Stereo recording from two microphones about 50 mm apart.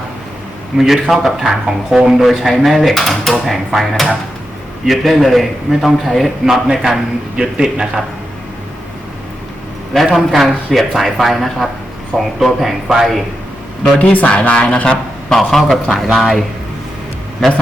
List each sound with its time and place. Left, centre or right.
0.8 s a man's voice: centre
9.9 s a man's voice: centre
14.0 s speech: left
15.4 s a man's voice: centre